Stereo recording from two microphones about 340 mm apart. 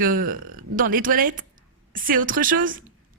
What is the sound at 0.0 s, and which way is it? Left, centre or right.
Speech, right.